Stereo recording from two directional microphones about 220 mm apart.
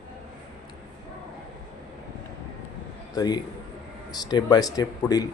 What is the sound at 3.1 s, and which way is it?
A man's voice, 15° left (ahead or behind).